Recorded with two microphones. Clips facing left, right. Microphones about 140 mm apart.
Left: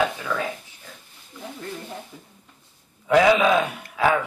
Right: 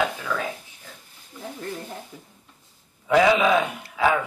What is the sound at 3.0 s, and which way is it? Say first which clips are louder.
Speech: left 1 dB; centre (ahead or behind).